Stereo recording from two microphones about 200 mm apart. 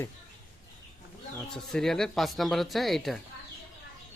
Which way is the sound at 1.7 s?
Centre (ahead or behind).